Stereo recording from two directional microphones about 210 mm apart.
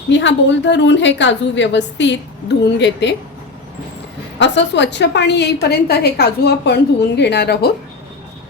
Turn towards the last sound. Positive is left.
turn(degrees=50)  # may be behind; listen again after turning